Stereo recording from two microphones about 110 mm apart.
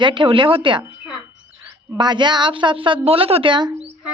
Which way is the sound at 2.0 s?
45° right (ahead or behind).